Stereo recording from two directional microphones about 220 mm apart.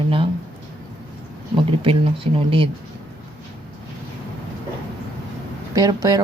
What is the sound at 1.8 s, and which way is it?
Speech, 25° right (ahead or behind).